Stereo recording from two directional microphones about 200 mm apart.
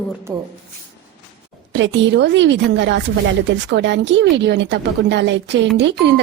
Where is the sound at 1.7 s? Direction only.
65° right (ahead or behind).